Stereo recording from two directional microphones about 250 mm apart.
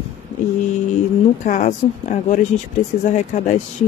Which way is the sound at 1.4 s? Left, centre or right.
Left.